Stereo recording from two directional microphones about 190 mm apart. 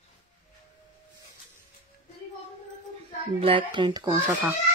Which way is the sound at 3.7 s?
25° right (ahead or behind).